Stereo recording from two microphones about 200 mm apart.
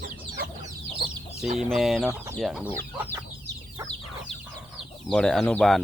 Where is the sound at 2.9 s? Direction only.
10° right (ahead or behind).